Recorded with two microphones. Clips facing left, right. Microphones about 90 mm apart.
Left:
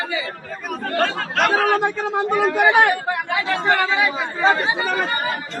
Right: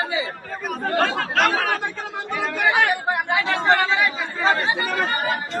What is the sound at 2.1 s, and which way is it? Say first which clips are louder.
Speech: left 8 dB; 45° left (ahead or behind).